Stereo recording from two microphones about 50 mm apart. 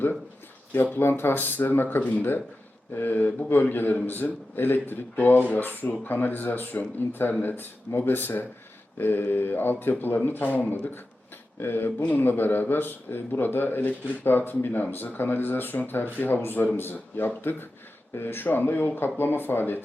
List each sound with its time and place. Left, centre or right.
0.9 s speech: left
11.6 s speech: left